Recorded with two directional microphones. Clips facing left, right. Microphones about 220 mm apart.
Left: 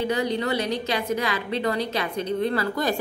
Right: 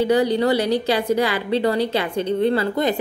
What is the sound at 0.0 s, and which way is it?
A woman's voice, 35° right (ahead or behind).